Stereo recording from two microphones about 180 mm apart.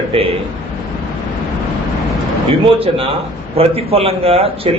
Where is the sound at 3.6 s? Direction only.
30° right (ahead or behind).